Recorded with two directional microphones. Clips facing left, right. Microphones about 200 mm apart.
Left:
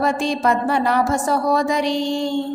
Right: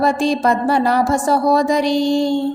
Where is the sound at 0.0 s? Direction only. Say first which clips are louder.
Right 3 dB; 35° right (ahead or behind).